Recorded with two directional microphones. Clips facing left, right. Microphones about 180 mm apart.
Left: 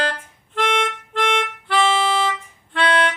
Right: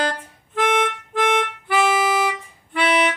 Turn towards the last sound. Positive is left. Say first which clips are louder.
# even
turn(degrees=-5)  # may be behind; listen again after turning